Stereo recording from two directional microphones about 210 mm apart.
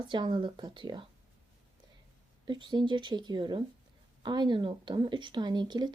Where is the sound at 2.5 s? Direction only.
20° right (ahead or behind).